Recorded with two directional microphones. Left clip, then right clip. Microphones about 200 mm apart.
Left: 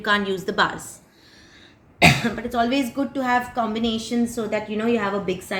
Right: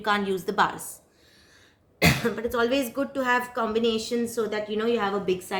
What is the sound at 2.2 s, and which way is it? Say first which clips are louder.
A woman's voice: left 2 dB; 55° right (ahead or behind).